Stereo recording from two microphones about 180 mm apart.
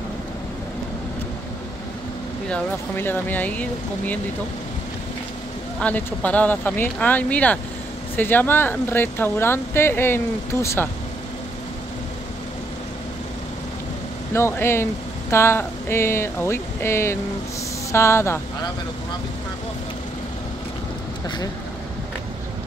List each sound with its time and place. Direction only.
2.5 s speech: 10° left (ahead or behind)
5.8 s speech: 10° left (ahead or behind)
14.3 s speech: 15° left (ahead or behind)